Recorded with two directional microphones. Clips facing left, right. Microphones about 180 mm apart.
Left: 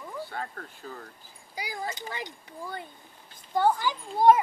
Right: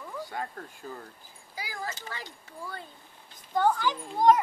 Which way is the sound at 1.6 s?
15° left (ahead or behind).